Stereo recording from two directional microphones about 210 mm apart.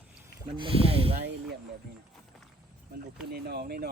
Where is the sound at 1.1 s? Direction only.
50° right (ahead or behind).